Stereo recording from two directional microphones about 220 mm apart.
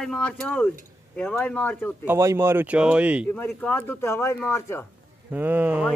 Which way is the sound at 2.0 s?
10° right (ahead or behind).